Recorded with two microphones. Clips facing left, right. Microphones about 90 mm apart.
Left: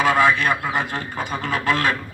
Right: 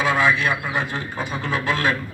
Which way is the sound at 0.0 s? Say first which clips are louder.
Left 2 dB; 55° left (ahead or behind).